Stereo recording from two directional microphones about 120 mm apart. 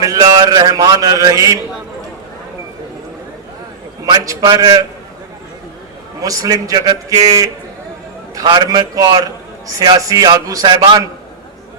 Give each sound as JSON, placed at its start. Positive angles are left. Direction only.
{"t": 0.0, "sound": "a man's voice", "side_deg": -30}
{"t": 4.0, "sound": "a man's voice", "side_deg": -30}
{"t": 6.2, "sound": "a man's voice", "side_deg": -30}